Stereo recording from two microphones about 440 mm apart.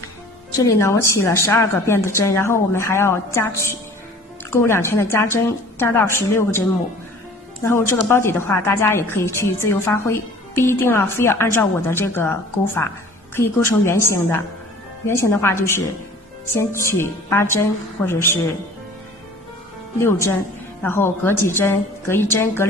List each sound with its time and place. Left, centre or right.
0.6 s a woman's voice: centre
7.6 s a woman's voice: centre
20.0 s a woman's voice: centre